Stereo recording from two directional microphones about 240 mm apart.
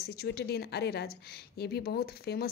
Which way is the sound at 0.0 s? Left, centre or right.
Left.